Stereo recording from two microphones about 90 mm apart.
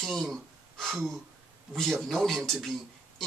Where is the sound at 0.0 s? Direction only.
Centre (ahead or behind).